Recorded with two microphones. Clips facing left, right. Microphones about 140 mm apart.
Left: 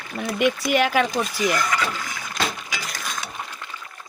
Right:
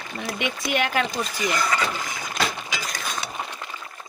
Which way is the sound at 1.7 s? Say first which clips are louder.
Even; 30° right (ahead or behind).